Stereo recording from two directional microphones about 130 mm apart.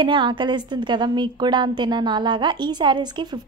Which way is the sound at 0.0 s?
40° right (ahead or behind).